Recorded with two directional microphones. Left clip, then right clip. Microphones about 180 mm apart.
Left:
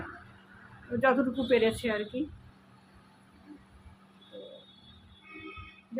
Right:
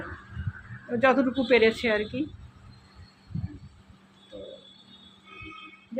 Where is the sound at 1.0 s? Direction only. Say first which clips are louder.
Right 4 dB; 15° right (ahead or behind).